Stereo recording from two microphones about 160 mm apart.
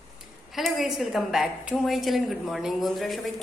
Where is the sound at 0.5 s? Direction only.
Centre (ahead or behind).